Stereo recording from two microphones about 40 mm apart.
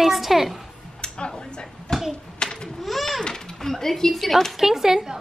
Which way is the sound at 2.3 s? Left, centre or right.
Centre.